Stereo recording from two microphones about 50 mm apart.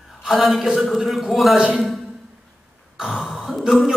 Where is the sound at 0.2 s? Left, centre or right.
Centre.